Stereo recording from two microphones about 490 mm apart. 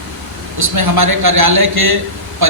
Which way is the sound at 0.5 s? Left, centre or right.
Right.